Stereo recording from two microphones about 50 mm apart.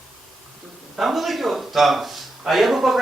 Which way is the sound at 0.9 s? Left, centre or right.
Centre.